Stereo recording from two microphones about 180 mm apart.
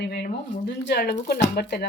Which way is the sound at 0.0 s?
65° left (ahead or behind).